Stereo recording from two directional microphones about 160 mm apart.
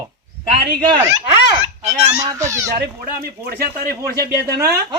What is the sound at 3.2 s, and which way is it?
Speech, 65° right (ahead or behind).